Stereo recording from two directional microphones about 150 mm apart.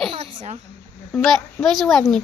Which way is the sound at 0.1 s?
45° right (ahead or behind).